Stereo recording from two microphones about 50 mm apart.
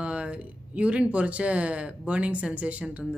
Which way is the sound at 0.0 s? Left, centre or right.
Right.